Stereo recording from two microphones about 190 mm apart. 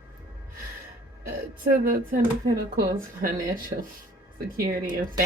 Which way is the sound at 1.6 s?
50° right (ahead or behind).